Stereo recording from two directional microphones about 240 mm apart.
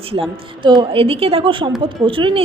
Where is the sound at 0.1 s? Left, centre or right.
Right.